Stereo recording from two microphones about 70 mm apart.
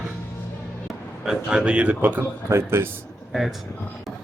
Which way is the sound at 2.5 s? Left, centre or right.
Right.